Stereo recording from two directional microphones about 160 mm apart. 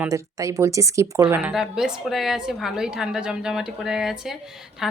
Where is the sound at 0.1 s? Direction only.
20° right (ahead or behind).